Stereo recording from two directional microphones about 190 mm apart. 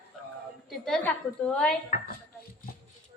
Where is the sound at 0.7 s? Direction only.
5° left (ahead or behind).